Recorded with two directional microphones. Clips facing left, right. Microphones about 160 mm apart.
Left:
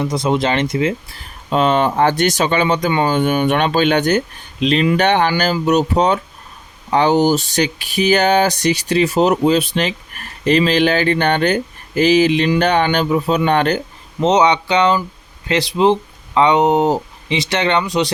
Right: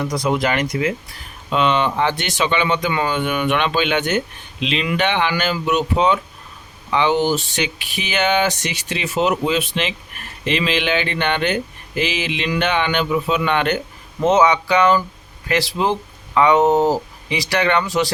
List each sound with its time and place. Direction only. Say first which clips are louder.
0.0 s speech: left 2 dB; 25° left (ahead or behind)
1.5 s speech: left 3 dB; 40° left (ahead or behind)
14.2 s speech: left 1 dB; 20° left (ahead or behind)